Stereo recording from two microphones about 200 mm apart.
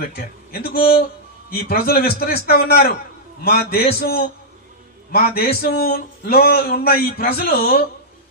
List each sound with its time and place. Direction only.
0.0 s a man's voice: 50° left (ahead or behind)